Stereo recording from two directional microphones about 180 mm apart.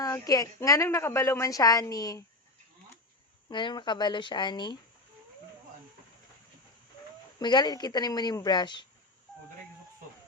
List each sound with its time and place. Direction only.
0.0 s a woman's voice: 20° left (ahead or behind)
3.5 s a woman's voice: 25° left (ahead or behind)
7.3 s a woman's voice: 20° left (ahead or behind)